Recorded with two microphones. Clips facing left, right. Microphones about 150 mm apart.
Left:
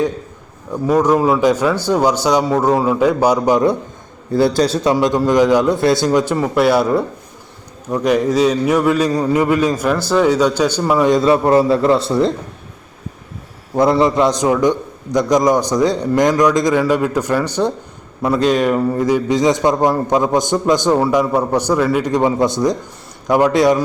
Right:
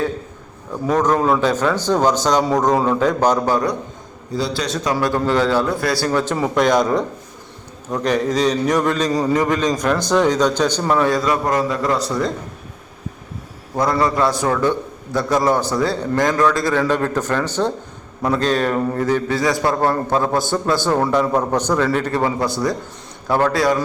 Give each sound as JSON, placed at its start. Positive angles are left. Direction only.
{"t": 0.9, "sound": "a man's voice", "side_deg": 10}
{"t": 4.3, "sound": "a man's voice", "side_deg": 55}
{"t": 4.6, "sound": "a man's voice", "side_deg": 30}
{"t": 6.1, "sound": "a man's voice", "side_deg": 10}
{"t": 11.1, "sound": "a man's voice", "side_deg": 25}
{"t": 13.7, "sound": "a man's voice", "side_deg": 25}